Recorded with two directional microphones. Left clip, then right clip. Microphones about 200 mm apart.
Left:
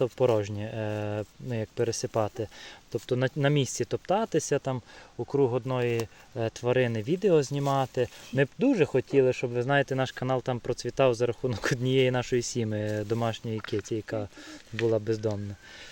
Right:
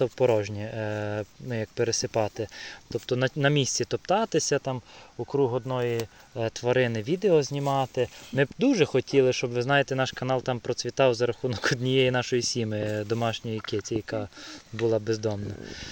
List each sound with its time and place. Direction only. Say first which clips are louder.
0.0 s speech: right 2 dB; 10° left (ahead or behind)
5.3 s speech: even; 20° left (ahead or behind)
8.5 s speech: right 2 dB; 5° right (ahead or behind)